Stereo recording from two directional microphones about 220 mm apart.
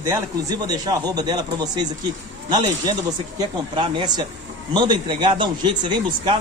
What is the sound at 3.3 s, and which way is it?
A man's voice, 20° right (ahead or behind).